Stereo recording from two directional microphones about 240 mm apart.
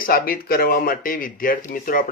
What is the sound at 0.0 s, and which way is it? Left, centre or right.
Speech, left.